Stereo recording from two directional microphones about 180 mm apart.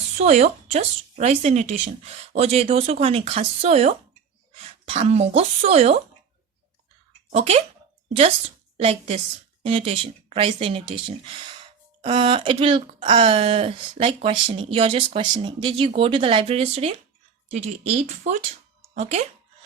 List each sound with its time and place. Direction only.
0.2 s speech: 40° right (ahead or behind)
7.3 s speech: 35° right (ahead or behind)
8.8 s speech: 35° right (ahead or behind)